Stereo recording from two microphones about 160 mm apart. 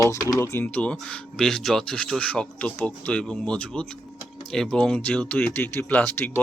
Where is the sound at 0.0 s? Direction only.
20° left (ahead or behind).